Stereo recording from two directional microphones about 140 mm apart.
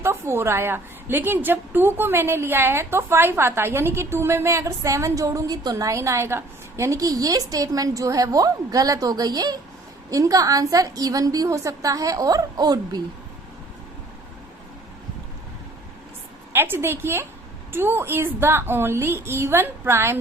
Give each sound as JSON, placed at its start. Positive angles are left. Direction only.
{"t": 0.0, "sound": "a woman's voice", "side_deg": -20}
{"t": 16.5, "sound": "a woman's voice", "side_deg": -15}